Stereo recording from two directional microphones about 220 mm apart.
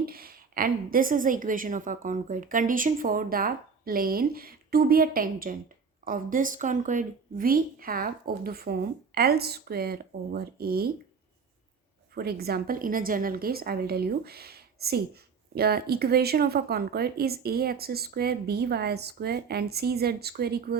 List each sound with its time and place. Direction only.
0.0 s a woman's voice: 45° right (ahead or behind)
12.1 s a woman's voice: 45° right (ahead or behind)